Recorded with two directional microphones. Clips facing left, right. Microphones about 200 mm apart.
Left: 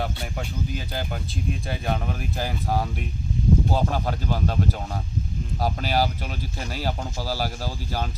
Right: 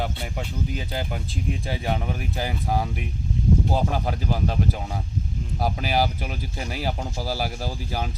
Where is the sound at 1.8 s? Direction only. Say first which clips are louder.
Even; 10° right (ahead or behind).